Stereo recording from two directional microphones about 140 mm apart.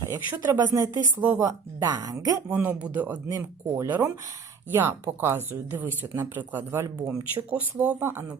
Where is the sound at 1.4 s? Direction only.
25° right (ahead or behind).